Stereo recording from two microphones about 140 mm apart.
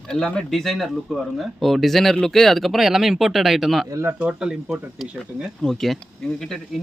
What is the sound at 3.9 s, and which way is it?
Speech, 20° right (ahead or behind).